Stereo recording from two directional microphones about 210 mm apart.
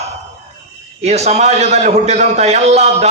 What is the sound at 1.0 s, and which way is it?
A man's voice, 30° right (ahead or behind).